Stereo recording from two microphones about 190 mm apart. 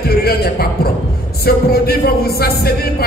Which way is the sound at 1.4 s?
55° left (ahead or behind).